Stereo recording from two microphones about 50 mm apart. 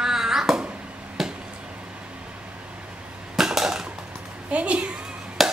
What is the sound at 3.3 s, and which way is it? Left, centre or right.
Crushing, centre.